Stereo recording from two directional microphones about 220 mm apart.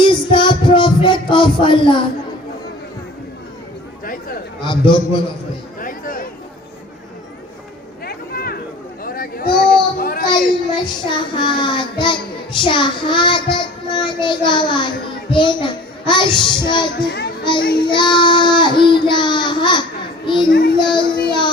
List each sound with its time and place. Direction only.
0.0 s music: 20° left (ahead or behind)
4.6 s child singing: 20° left (ahead or behind)
5.8 s a sound: 40° left (ahead or behind)
8.0 s vehicle: 45° left (ahead or behind)
9.0 s a sound: 40° left (ahead or behind)
10.2 s child singing: 20° left (ahead or behind)
20.5 s child singing: 40° left (ahead or behind)
20.7 s speech: 20° left (ahead or behind)